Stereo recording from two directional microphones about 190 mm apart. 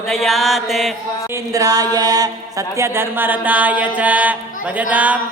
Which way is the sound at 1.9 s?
20° right (ahead or behind).